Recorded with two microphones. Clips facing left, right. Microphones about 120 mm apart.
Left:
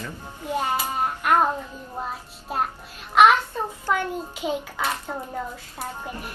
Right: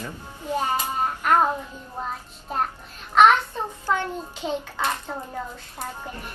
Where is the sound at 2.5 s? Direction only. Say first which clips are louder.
Even; 5° left (ahead or behind).